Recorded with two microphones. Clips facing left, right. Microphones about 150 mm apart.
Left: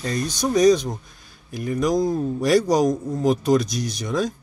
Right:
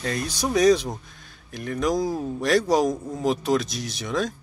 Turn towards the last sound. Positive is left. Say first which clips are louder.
# left 3 dB
turn(degrees=0)  # may be behind; listen again after turning